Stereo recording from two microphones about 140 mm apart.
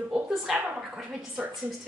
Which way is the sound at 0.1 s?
5° right (ahead or behind).